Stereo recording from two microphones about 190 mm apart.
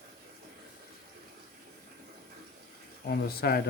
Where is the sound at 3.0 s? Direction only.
55° left (ahead or behind).